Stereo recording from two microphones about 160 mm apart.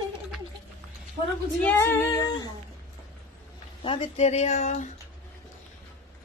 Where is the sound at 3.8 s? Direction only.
40° left (ahead or behind).